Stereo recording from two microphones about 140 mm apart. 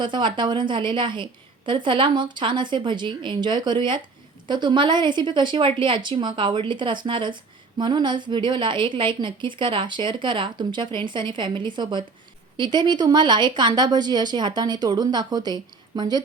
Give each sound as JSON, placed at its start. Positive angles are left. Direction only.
{"t": 0.0, "sound": "a woman's voice", "side_deg": -35}